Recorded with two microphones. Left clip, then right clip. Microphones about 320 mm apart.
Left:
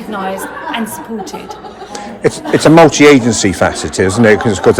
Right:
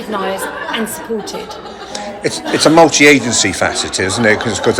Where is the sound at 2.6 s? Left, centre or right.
Left.